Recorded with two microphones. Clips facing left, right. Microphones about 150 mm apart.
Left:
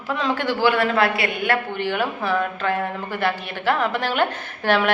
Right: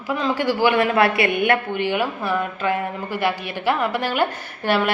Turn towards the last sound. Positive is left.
turn(degrees=-10)  # may be behind; listen again after turning